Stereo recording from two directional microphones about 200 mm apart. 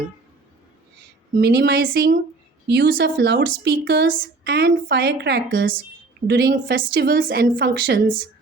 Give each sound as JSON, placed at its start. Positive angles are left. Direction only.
{"t": 1.4, "sound": "a woman's voice", "side_deg": -55}
{"t": 7.3, "sound": "a woman's voice", "side_deg": -60}